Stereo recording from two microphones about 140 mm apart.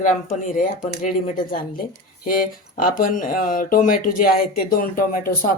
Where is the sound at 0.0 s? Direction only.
70° left (ahead or behind).